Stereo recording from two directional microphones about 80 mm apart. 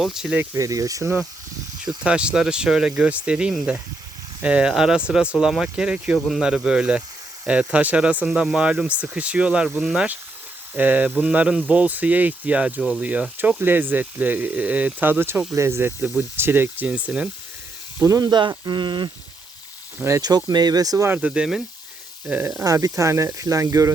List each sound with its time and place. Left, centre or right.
0.0 s speech: centre
0.5 s speech: right
2.0 s speech: centre
10.8 s speech: right
13.6 s speech: right
18.0 s speech: right
18.3 s speech: right
20.2 s speech: right
21.1 s speech: centre
22.4 s speech: right